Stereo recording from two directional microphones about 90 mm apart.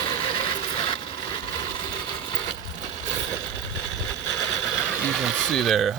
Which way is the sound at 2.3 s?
60° left (ahead or behind).